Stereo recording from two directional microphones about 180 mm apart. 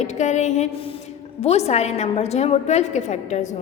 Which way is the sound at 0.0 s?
40° left (ahead or behind).